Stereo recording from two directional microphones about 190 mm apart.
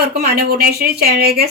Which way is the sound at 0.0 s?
55° right (ahead or behind).